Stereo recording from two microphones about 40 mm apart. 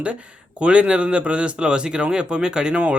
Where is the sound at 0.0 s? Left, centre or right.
Right.